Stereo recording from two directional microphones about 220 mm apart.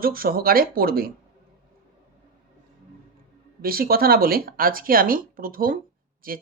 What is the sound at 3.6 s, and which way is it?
Speech, 40° right (ahead or behind).